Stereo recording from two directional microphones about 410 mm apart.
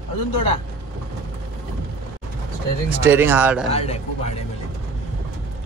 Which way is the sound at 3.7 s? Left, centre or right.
Centre.